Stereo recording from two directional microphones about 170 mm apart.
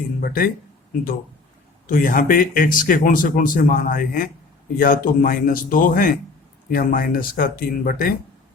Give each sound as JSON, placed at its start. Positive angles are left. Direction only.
{"t": 0.2, "sound": "speech", "side_deg": 60}
{"t": 1.9, "sound": "speech", "side_deg": 50}